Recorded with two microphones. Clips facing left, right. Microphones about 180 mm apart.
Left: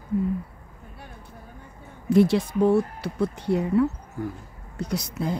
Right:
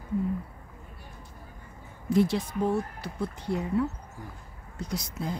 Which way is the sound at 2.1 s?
70° left (ahead or behind).